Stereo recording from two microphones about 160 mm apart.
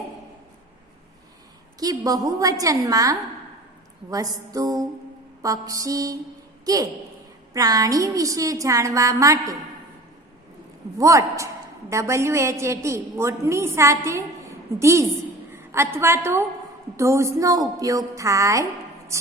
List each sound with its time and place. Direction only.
1.8 s a woman's voice: 20° right (ahead or behind)
7.5 s a woman's voice: 20° right (ahead or behind)
10.9 s a woman's voice: 20° right (ahead or behind)